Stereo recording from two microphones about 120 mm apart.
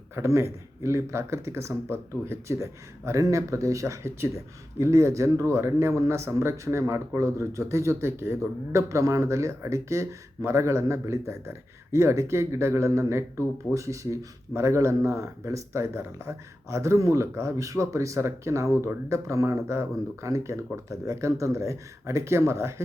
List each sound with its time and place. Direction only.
0.2 s speech: 25° right (ahead or behind)